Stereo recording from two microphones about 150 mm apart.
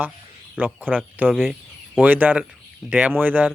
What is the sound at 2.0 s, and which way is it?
Speech, 10° right (ahead or behind).